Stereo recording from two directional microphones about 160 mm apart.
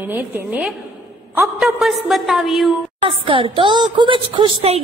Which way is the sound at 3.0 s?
35° right (ahead or behind).